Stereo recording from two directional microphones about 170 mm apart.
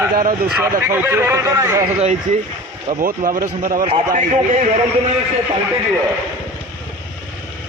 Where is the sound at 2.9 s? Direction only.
45° right (ahead or behind).